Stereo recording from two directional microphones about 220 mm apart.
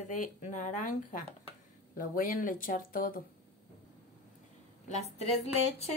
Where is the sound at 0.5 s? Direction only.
35° left (ahead or behind).